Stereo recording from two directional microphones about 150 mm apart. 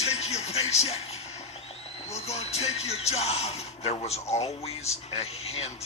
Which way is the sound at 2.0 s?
45° left (ahead or behind).